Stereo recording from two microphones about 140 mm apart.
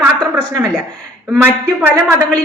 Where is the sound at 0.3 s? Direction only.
20° right (ahead or behind).